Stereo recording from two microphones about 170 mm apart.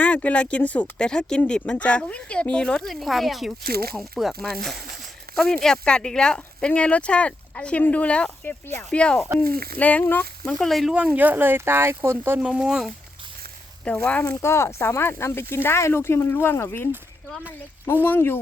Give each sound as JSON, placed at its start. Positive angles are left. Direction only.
{"t": 0.0, "sound": "speech", "side_deg": 10}
{"t": 3.6, "sound": "speech", "side_deg": -65}
{"t": 3.9, "sound": "speech", "side_deg": 0}
{"t": 9.4, "sound": "speech", "side_deg": -60}
{"t": 9.7, "sound": "speech", "side_deg": 10}
{"t": 13.8, "sound": "speech", "side_deg": 5}
{"t": 17.2, "sound": "speech", "side_deg": 0}
{"t": 18.0, "sound": "speech", "side_deg": 15}